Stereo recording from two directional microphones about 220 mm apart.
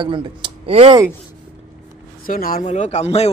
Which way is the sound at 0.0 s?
20° right (ahead or behind).